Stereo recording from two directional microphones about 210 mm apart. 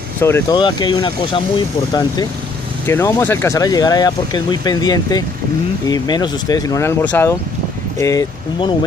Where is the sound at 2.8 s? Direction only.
10° left (ahead or behind).